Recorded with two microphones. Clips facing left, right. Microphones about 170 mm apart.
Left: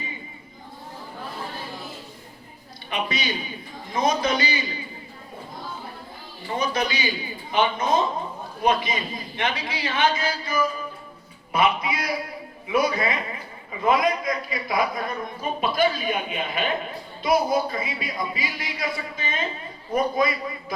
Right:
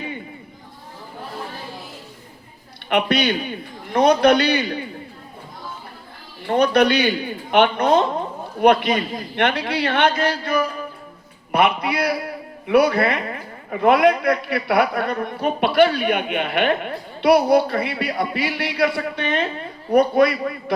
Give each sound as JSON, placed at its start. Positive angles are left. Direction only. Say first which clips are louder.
{"t": 2.9, "sound": "a man's voice", "louder": "right 9 dB", "side_deg": -65}
{"t": 6.5, "sound": "a man's voice", "louder": "right 10 dB", "side_deg": -65}